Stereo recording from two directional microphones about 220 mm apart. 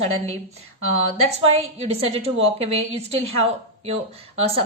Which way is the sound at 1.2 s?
25° right (ahead or behind).